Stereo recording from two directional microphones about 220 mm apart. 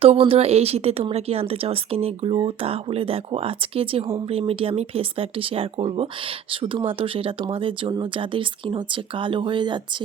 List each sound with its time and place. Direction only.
0.0 s a woman's voice: 25° right (ahead or behind)